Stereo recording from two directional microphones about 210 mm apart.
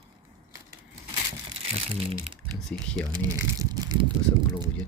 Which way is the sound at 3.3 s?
15° right (ahead or behind).